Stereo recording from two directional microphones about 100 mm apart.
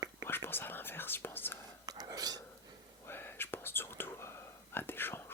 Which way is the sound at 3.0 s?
20° left (ahead or behind).